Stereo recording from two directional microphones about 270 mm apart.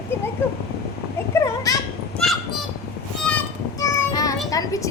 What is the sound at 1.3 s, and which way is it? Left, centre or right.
Children playing, centre.